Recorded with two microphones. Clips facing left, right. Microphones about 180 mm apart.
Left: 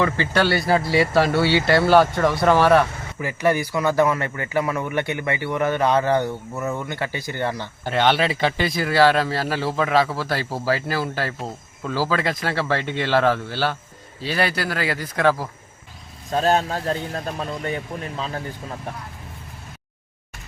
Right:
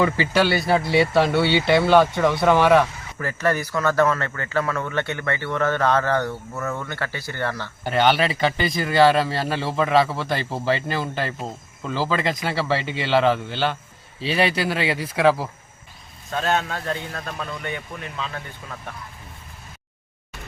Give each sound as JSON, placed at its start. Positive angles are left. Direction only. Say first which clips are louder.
{"t": 0.0, "sound": "speech", "louder": "right 1 dB", "side_deg": -5}
{"t": 3.2, "sound": "a man's voice", "louder": "left 2 dB", "side_deg": 10}
{"t": 7.9, "sound": "a man's voice", "louder": "even", "side_deg": 0}
{"t": 14.9, "sound": "speech", "louder": "right 1 dB", "side_deg": -5}
{"t": 16.3, "sound": "speech", "louder": "left 4 dB", "side_deg": 35}